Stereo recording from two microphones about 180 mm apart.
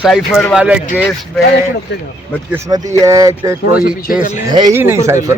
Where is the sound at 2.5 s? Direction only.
15° right (ahead or behind).